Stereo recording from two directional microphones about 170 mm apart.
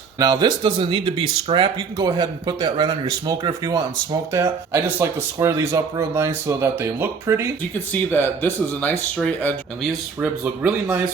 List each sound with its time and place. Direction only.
0.2 s speech: 25° right (ahead or behind)
2.0 s speech: 20° right (ahead or behind)
8.1 s speech: 10° left (ahead or behind)
10.2 s speech: 10° right (ahead or behind)